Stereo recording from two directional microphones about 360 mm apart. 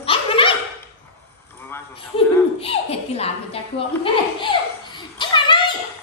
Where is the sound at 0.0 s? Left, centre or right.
Centre.